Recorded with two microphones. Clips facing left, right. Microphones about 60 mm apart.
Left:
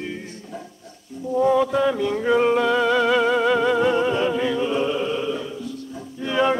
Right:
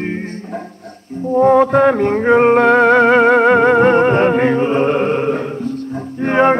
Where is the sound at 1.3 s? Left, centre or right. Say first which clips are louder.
Right 8 dB; right.